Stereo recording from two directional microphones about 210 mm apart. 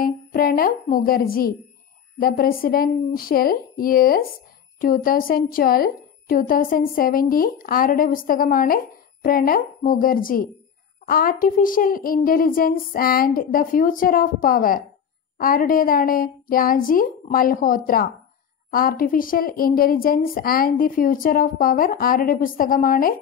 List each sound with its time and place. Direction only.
0.0 s a woman's voice: 45° left (ahead or behind)